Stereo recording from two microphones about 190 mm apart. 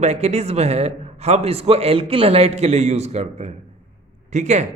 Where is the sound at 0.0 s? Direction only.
35° right (ahead or behind).